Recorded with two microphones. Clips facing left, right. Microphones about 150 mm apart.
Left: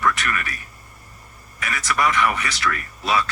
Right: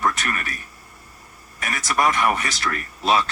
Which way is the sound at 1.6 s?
45° right (ahead or behind).